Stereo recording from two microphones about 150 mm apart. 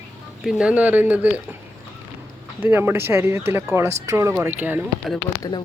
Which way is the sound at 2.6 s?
15° right (ahead or behind).